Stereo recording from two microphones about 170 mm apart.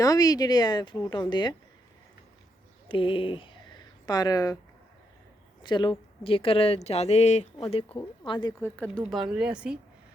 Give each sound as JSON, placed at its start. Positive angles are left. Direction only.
{"t": 0.0, "sound": "a woman's voice", "side_deg": 20}
{"t": 2.9, "sound": "a woman's voice", "side_deg": 30}
{"t": 5.6, "sound": "a woman's voice", "side_deg": 25}
{"t": 8.6, "sound": "speech", "side_deg": 10}
{"t": 9.0, "sound": "speech", "side_deg": -5}